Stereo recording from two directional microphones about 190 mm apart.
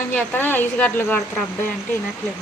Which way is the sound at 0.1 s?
10° left (ahead or behind).